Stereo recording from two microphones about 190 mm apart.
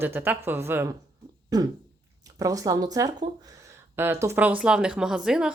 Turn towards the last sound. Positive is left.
turn(degrees=-5)  # may be behind; listen again after turning